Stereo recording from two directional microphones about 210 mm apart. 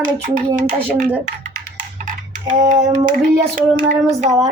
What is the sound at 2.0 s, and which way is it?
Typing, 35° right (ahead or behind).